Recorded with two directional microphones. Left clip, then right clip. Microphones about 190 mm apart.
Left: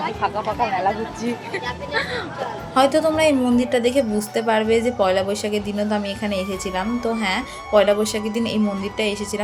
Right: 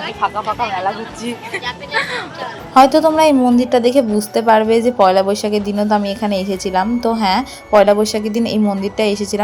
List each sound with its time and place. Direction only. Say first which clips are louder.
0.4 s speech: right 2 dB; centre (ahead or behind)
2.7 s a woman's voice: right 7 dB; 25° right (ahead or behind)